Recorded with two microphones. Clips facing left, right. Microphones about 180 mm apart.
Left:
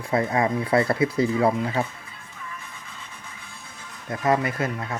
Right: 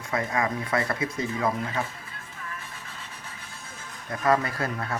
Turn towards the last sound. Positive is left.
turn(degrees=15)  # may be behind; listen again after turning